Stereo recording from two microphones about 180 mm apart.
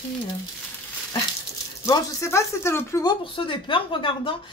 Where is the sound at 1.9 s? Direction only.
15° left (ahead or behind).